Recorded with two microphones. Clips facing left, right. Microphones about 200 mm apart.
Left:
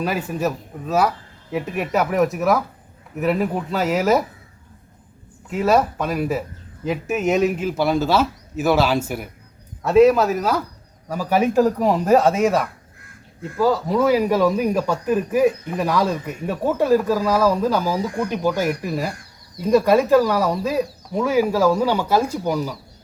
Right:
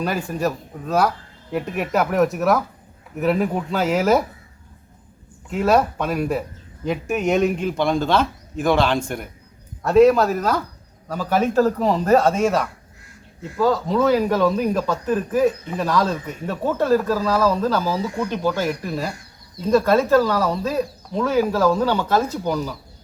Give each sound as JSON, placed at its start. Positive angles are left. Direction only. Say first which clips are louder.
{"t": 0.0, "sound": "a man's voice", "louder": "even", "side_deg": 5}
{"t": 5.5, "sound": "a man's voice", "louder": "even", "side_deg": 0}
{"t": 13.0, "sound": "crow", "louder": "left 2 dB", "side_deg": 55}
{"t": 13.6, "sound": "speech", "louder": "even", "side_deg": 10}